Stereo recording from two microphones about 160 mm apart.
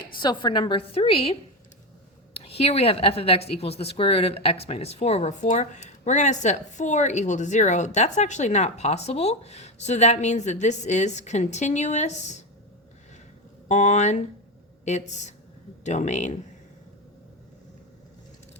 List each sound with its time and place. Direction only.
0.2 s a woman's voice: 30° left (ahead or behind); by 12.4 s 45° left (ahead or behind)
13.7 s a woman's voice: 50° left (ahead or behind)